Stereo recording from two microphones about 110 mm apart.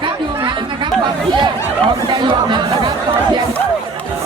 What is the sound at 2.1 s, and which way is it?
Chatter, 45° right (ahead or behind).